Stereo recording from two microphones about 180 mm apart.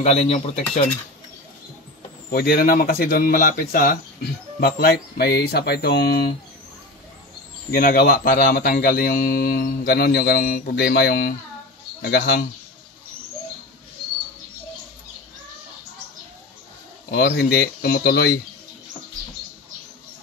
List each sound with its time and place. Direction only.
0.0 s speech: 40° left (ahead or behind)
2.3 s speech: 55° left (ahead or behind)
7.7 s speech: 50° left (ahead or behind)
17.1 s speech: 60° left (ahead or behind)